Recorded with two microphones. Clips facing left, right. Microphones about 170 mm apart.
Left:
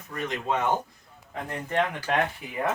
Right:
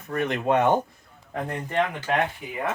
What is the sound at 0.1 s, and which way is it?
Speech, 60° right (ahead or behind).